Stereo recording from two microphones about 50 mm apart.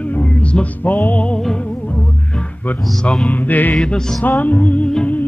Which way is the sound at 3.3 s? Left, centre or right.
Left.